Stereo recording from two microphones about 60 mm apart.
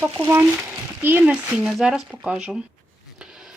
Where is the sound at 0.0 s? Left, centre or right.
Right.